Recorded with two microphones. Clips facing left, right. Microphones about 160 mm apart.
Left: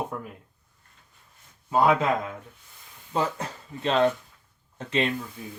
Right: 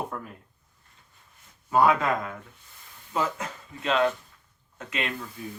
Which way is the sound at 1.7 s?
25° left (ahead or behind).